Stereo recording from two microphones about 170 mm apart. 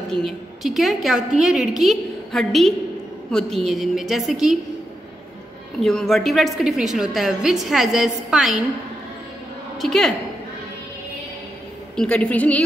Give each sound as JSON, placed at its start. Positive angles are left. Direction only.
{"t": 0.1, "sound": "a woman's voice", "side_deg": 0}
{"t": 5.8, "sound": "a woman's voice", "side_deg": 0}
{"t": 9.8, "sound": "a woman's voice", "side_deg": 0}
{"t": 11.9, "sound": "a woman's voice", "side_deg": 5}